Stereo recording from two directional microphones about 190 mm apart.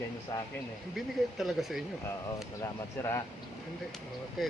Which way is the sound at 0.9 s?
Centre (ahead or behind).